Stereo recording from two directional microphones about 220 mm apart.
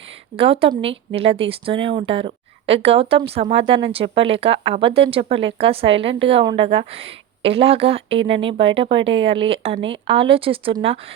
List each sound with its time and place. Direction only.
0.3 s a woman's voice: 25° right (ahead or behind)